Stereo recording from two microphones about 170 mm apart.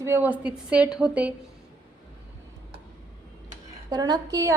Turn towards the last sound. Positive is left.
turn(degrees=-20)  # may be behind; listen again after turning